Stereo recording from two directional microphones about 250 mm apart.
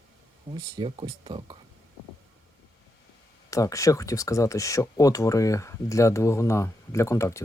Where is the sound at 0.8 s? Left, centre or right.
Centre.